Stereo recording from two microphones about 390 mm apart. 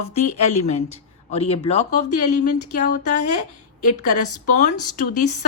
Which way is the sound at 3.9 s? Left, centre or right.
Centre.